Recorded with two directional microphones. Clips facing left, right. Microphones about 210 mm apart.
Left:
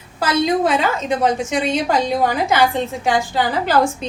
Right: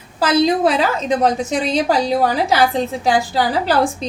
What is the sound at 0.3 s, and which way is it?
A woman's voice, 35° right (ahead or behind).